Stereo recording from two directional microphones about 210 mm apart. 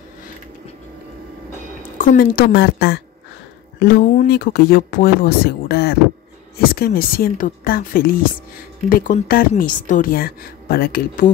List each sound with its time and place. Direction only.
2.0 s a woman's voice: 45° left (ahead or behind)
4.3 s a woman's voice: 50° left (ahead or behind)